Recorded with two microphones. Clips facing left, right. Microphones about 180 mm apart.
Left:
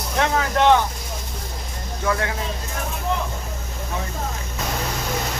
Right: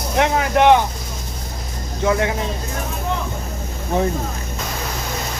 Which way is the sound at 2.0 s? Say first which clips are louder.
Right 5 dB; 20° right (ahead or behind).